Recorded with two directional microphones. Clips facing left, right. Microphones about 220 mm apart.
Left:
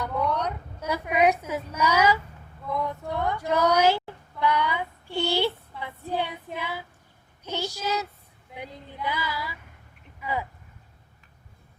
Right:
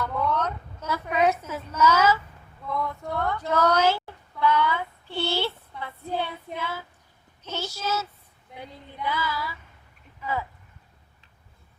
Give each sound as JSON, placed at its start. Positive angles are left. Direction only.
{"t": 0.0, "sound": "a sound", "side_deg": 15}
{"t": 5.8, "sound": "child singing", "side_deg": 15}
{"t": 6.6, "sound": "a woman's voice", "side_deg": 15}
{"t": 8.5, "sound": "female singing", "side_deg": 15}
{"t": 9.0, "sound": "a woman's voice", "side_deg": 15}
{"t": 10.2, "sound": "a sound", "side_deg": 15}